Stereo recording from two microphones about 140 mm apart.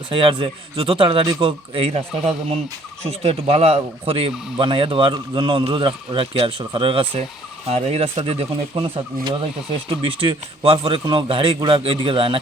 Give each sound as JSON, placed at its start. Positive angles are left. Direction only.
{"t": 0.1, "sound": "speech", "side_deg": -40}